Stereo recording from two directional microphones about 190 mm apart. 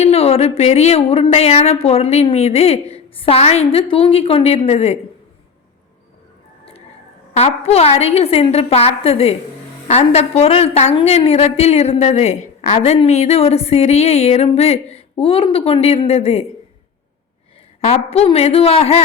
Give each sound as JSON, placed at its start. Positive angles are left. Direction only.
{"t": 0.0, "sound": "a woman's voice", "side_deg": 30}
{"t": 7.3, "sound": "a woman's voice", "side_deg": 35}
{"t": 17.7, "sound": "a woman's voice", "side_deg": 35}